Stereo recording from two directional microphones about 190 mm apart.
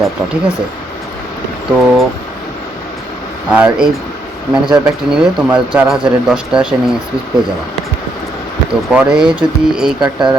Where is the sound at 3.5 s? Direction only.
5° right (ahead or behind).